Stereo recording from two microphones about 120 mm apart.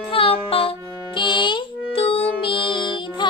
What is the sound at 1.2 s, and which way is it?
Music, 40° left (ahead or behind).